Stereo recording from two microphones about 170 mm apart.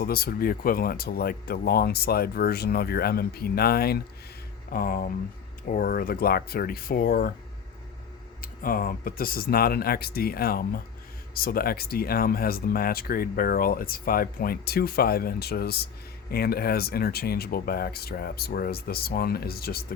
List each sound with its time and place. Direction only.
0.0 s speech: 65° left (ahead or behind)
8.4 s speech: 55° left (ahead or behind)